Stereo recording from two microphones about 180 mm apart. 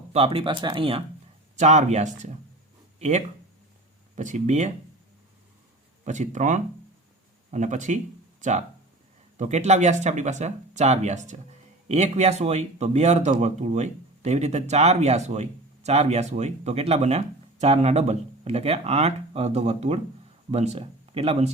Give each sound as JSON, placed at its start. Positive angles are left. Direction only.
{"t": 0.1, "sound": "speech", "side_deg": -30}
{"t": 6.1, "sound": "speech", "side_deg": -45}